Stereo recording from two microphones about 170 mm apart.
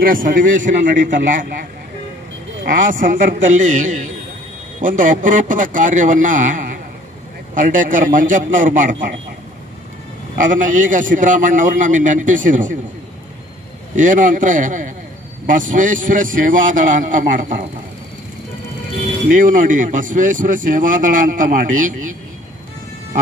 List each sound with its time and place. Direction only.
0.0 s speech: 55° right (ahead or behind)
2.6 s speech: 50° right (ahead or behind)
10.3 s speech: 50° right (ahead or behind)
13.9 s speech: 50° right (ahead or behind)
19.2 s speech: 50° right (ahead or behind)